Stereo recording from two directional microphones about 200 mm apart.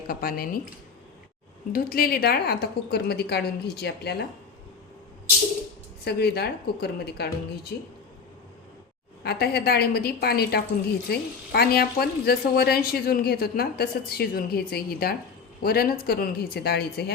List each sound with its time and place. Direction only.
0.1 s a woman's voice: 50° left (ahead or behind)
1.7 s a woman's voice: 50° left (ahead or behind)
6.1 s a woman's voice: 55° left (ahead or behind)
9.2 s a woman's voice: 50° left (ahead or behind)